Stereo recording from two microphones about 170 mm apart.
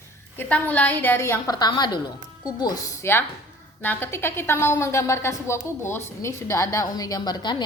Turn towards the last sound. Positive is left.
turn(degrees=25)  # may be behind; listen again after turning